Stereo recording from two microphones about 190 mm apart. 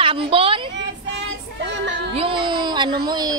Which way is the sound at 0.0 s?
30° right (ahead or behind).